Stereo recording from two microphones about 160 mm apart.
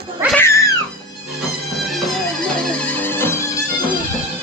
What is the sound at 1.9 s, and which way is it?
Music, centre (ahead or behind).